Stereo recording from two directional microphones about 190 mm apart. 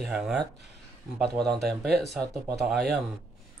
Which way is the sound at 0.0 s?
5° right (ahead or behind).